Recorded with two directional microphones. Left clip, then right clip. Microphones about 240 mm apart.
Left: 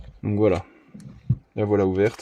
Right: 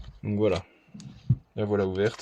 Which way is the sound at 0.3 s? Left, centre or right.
Left.